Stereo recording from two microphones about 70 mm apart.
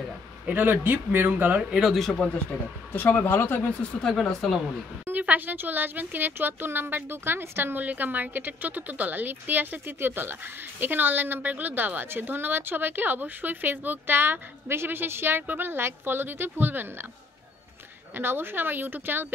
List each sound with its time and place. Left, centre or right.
0.5 s a woman's voice: right
1.6 s speech: centre
2.9 s speech: left
4.2 s a woman's voice: centre
5.2 s a woman's voice: right
18.1 s a woman's voice: right